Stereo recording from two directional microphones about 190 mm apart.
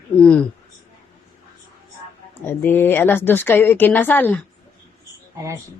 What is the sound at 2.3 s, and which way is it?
A woman's voice, 10° left (ahead or behind).